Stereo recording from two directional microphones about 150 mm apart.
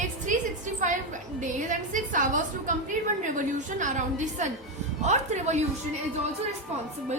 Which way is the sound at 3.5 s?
55° right (ahead or behind).